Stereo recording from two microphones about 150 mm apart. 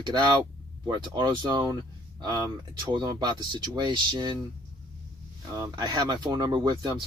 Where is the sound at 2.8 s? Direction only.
30° right (ahead or behind).